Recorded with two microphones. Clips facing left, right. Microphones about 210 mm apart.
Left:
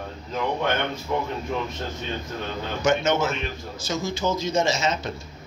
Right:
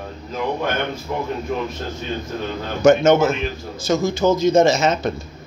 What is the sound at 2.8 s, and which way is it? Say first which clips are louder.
Speech: right 9 dB; 50° right (ahead or behind).